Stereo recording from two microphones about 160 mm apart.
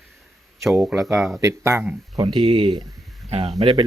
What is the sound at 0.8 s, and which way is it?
Speech, centre (ahead or behind).